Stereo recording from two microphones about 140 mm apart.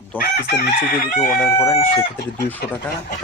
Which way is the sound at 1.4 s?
20° left (ahead or behind).